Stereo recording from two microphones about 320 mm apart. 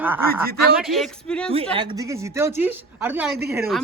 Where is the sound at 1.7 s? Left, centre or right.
Centre.